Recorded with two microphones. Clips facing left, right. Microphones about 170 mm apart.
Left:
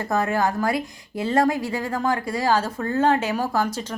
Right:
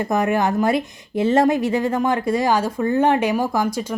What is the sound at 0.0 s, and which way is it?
A woman's voice, 15° right (ahead or behind).